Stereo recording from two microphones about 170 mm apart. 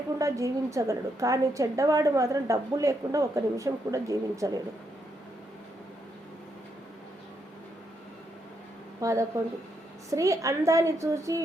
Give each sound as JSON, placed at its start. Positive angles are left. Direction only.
{"t": 0.2, "sound": "a woman's voice", "side_deg": -20}
{"t": 9.0, "sound": "a woman's voice", "side_deg": -20}